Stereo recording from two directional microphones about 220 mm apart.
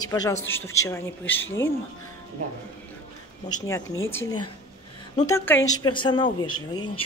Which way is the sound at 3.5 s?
20° left (ahead or behind).